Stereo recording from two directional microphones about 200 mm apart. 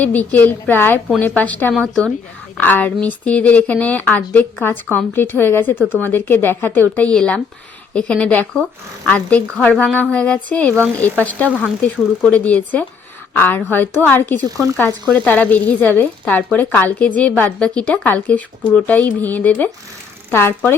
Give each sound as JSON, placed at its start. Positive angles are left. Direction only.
{"t": 0.0, "sound": "a woman's voice", "side_deg": 5}
{"t": 2.6, "sound": "speech", "side_deg": 10}
{"t": 5.8, "sound": "speech", "side_deg": -5}
{"t": 6.1, "sound": "a woman's voice", "side_deg": 10}
{"t": 14.4, "sound": "speech", "side_deg": -15}
{"t": 15.1, "sound": "speech", "side_deg": 5}